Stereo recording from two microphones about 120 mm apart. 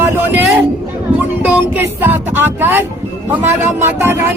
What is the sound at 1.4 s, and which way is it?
Music, 15° right (ahead or behind).